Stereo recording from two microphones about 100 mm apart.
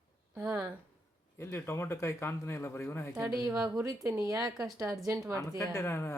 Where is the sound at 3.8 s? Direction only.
30° right (ahead or behind).